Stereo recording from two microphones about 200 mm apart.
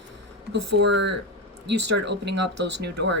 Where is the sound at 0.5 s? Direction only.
60° right (ahead or behind).